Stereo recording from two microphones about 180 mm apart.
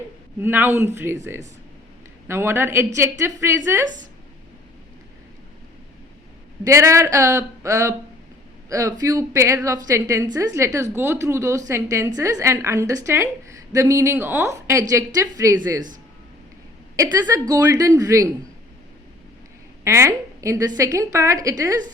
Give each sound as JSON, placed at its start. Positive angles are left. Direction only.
{"t": 0.4, "sound": "a woman's voice", "side_deg": -10}
{"t": 6.7, "sound": "a woman's voice", "side_deg": -15}
{"t": 17.0, "sound": "a woman's voice", "side_deg": -15}
{"t": 19.8, "sound": "a woman's voice", "side_deg": -15}